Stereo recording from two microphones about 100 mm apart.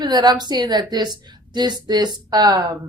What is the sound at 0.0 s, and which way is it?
A woman's voice, 45° right (ahead or behind).